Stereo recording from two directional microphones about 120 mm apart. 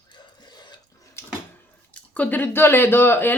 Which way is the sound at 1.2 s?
20° left (ahead or behind).